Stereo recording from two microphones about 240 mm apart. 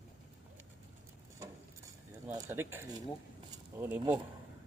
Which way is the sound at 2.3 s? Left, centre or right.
Centre.